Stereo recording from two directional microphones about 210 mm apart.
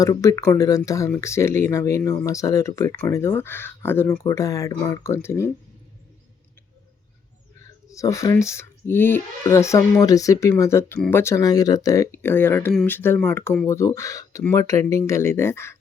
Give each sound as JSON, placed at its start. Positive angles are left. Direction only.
{"t": 0.0, "sound": "speech", "side_deg": 15}
{"t": 7.9, "sound": "speech", "side_deg": 15}